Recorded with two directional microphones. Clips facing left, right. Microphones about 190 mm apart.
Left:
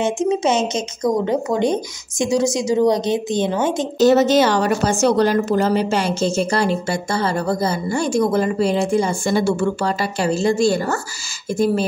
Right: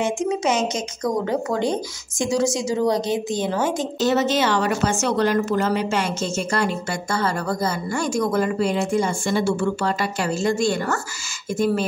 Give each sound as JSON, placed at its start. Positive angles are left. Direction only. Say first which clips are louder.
{"t": 0.0, "sound": "speech", "louder": "left 4 dB", "side_deg": 25}
{"t": 4.0, "sound": "a woman's voice", "louder": "left 7 dB", "side_deg": 40}